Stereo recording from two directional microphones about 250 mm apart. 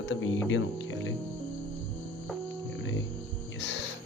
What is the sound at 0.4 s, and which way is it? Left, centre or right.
Speech, left.